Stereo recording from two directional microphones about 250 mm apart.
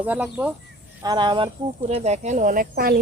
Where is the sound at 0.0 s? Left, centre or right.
Centre.